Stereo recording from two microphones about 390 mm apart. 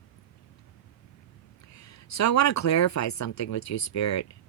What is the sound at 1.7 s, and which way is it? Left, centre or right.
Speech, left.